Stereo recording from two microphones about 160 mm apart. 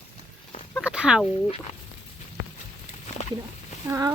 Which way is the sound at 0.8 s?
5° right (ahead or behind).